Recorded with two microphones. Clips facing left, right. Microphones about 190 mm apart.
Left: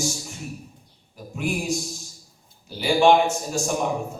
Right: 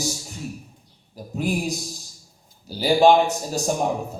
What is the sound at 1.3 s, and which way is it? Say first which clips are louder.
A man's voice: right 1 dB; 40° right (ahead or behind).